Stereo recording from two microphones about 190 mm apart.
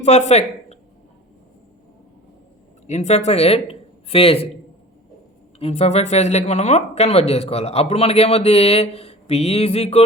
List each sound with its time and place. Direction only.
0.0 s speech: 35° left (ahead or behind)
2.8 s speech: 35° left (ahead or behind)
5.5 s speech: 30° left (ahead or behind)